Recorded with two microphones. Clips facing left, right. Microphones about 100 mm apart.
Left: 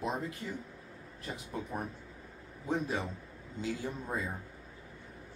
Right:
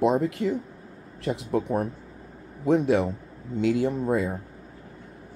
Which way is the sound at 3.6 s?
80° right.